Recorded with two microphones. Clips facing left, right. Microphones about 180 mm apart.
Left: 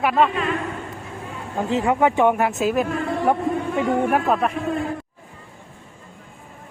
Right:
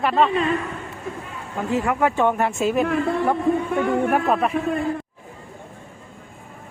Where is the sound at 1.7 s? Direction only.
20° left (ahead or behind); by 2.9 s centre (ahead or behind).